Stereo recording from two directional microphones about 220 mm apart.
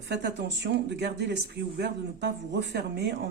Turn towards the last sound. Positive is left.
turn(degrees=-50)  # may be behind; listen again after turning